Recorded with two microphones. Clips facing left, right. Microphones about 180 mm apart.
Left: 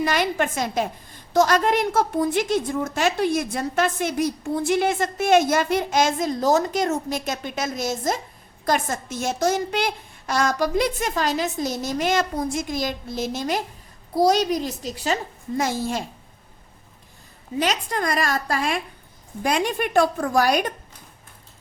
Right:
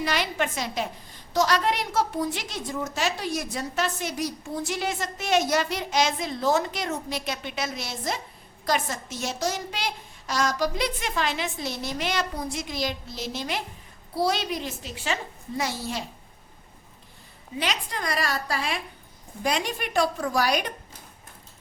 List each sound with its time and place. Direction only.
0.0 s a woman's voice: 50° left (ahead or behind)
17.6 s a woman's voice: 45° left (ahead or behind)